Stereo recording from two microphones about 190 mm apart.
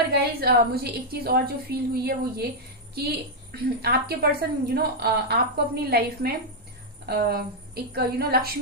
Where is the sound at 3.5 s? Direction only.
55° right (ahead or behind).